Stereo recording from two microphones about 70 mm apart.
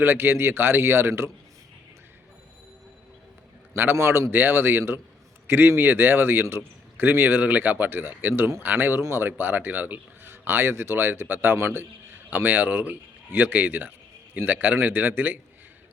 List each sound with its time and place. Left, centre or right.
0.0 s speech: right
3.9 s speech: right
9.0 s speech: right